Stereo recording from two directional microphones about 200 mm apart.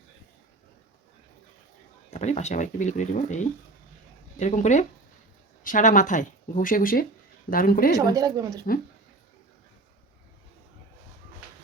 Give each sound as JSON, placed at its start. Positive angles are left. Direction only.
{"t": 2.0, "sound": "speech", "side_deg": 35}
{"t": 7.9, "sound": "a woman's voice", "side_deg": -15}